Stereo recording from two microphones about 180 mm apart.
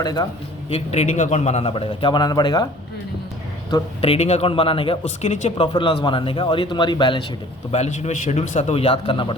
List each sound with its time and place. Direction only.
0.0 s a man's voice: 20° left (ahead or behind)
0.7 s a man's voice: 35° left (ahead or behind)
4.0 s a man's voice: 35° left (ahead or behind)
5.7 s a man's voice: 25° left (ahead or behind)
7.7 s a man's voice: 35° left (ahead or behind)